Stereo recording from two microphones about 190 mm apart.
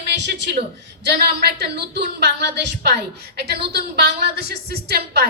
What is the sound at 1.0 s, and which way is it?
A woman's voice, 60° right (ahead or behind).